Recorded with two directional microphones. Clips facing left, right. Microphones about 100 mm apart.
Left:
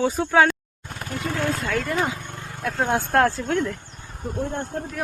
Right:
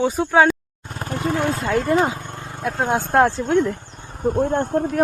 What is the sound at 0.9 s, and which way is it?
Vehicle, 35° right (ahead or behind).